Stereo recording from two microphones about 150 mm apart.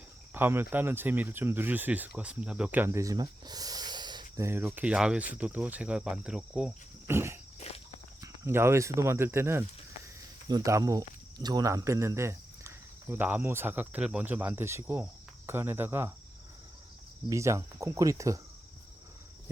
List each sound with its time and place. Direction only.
0.3 s speech: 15° right (ahead or behind)
4.4 s speech: 15° right (ahead or behind)
8.2 s speech: 15° right (ahead or behind)
17.2 s cricket: 20° right (ahead or behind)